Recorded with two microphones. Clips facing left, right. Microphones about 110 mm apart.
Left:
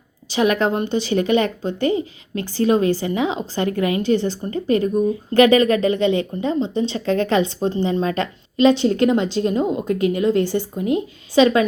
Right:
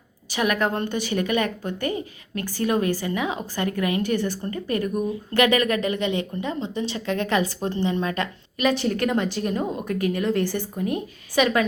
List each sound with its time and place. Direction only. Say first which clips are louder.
0.3 s a woman's voice: left 5 dB; 25° left (ahead or behind)